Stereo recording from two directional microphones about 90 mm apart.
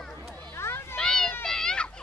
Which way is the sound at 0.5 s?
30° left (ahead or behind).